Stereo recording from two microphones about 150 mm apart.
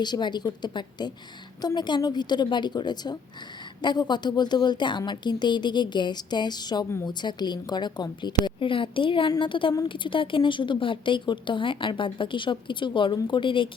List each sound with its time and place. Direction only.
0.0 s a woman's voice: 30° left (ahead or behind)